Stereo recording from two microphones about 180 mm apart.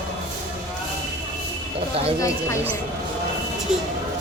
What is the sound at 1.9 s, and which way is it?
Speech, 35° right (ahead or behind).